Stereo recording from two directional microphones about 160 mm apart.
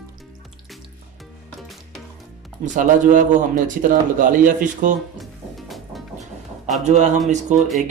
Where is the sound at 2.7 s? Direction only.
55° right (ahead or behind).